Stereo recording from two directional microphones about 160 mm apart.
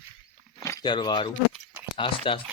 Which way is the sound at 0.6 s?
20° left (ahead or behind).